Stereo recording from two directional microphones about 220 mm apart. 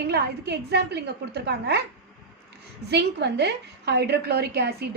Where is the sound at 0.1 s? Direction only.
50° right (ahead or behind).